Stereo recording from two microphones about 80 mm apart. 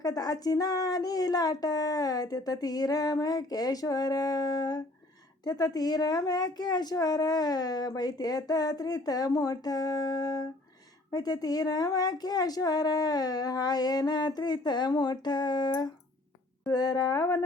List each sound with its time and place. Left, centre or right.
0.0 s a woman's voice: left